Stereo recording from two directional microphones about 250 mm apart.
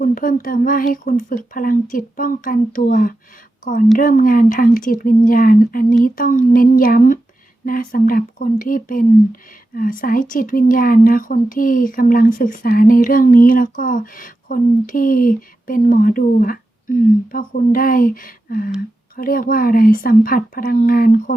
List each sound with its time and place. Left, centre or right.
0.0 s speech: left